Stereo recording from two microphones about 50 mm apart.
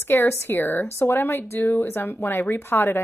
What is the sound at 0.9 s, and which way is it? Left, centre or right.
Speech, left.